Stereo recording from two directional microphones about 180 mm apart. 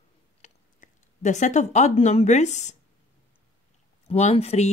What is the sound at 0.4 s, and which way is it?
Speech, 45° left (ahead or behind).